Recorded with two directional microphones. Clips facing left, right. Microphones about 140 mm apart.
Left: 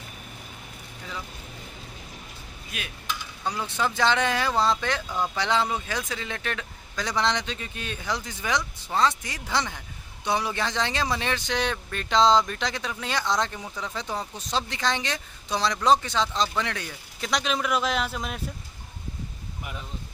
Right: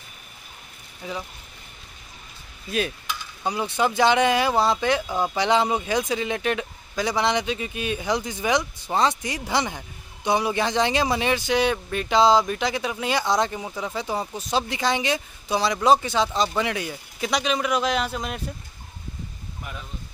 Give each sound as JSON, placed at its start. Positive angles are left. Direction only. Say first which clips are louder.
{"t": 1.0, "sound": "speech", "louder": "right 6 dB", "side_deg": -15}
{"t": 2.7, "sound": "a sound", "louder": "right 13 dB", "side_deg": -35}
{"t": 3.1, "sound": "speech", "louder": "right 3 dB", "side_deg": -15}